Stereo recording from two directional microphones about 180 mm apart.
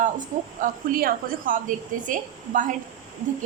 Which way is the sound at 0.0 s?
45° right (ahead or behind).